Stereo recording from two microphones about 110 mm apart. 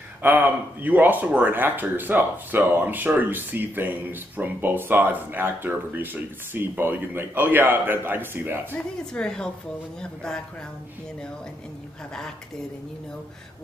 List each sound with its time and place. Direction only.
0.2 s speech: 15° right (ahead or behind)
8.7 s a woman's voice: 10° left (ahead or behind)